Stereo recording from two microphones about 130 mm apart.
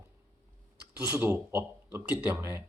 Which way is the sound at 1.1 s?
15° right (ahead or behind).